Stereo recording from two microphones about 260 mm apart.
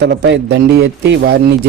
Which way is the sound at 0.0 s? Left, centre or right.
Right.